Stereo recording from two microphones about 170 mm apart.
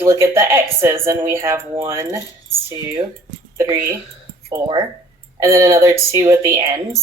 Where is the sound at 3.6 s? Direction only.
10° right (ahead or behind).